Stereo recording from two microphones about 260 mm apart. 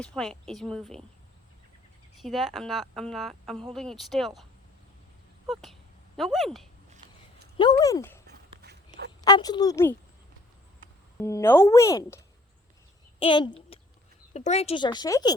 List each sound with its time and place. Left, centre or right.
0.0 s speech: centre
2.2 s speech: centre
6.1 s speech: centre
7.6 s speech: centre
8.3 s a sound: right
9.2 s speech: centre
11.2 s a child's voice: centre
13.7 s a sound: left
14.3 s speech: left